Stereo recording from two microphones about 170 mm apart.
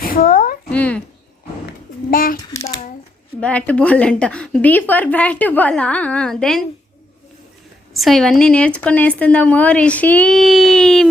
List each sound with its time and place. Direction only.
0.0 s speech: 60° left (ahead or behind)
0.7 s a woman's voice: 10° left (ahead or behind)
2.0 s a child's voice: 55° left (ahead or behind)
3.4 s a woman's voice: 5° left (ahead or behind)
7.9 s a woman's voice: centre (ahead or behind)